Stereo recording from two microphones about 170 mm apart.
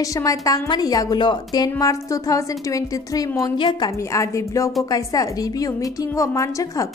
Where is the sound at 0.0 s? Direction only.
20° left (ahead or behind).